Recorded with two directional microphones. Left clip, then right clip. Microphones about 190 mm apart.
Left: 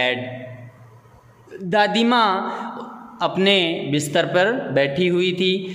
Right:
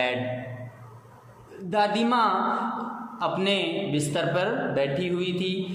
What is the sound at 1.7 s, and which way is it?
A man's voice, 40° left (ahead or behind).